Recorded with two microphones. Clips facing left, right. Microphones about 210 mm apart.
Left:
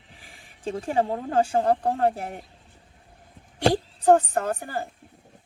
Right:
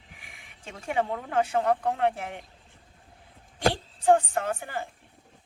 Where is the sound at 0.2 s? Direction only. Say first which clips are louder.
Left 7 dB; 35° left (ahead or behind).